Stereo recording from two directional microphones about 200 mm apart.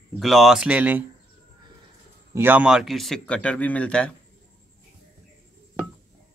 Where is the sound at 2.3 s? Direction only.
10° right (ahead or behind).